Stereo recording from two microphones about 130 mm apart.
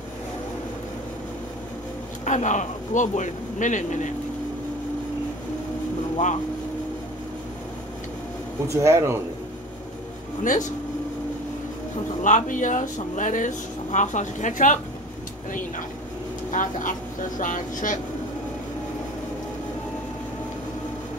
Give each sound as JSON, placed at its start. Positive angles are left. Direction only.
{"t": 2.2, "sound": "speech", "side_deg": 65}
{"t": 8.6, "sound": "speech", "side_deg": -20}
{"t": 10.4, "sound": "speech", "side_deg": 75}
{"t": 12.2, "sound": "speech", "side_deg": 75}
{"t": 16.4, "sound": "speech", "side_deg": 85}